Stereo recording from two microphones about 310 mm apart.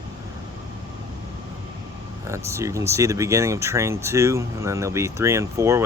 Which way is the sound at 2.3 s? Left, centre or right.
Centre.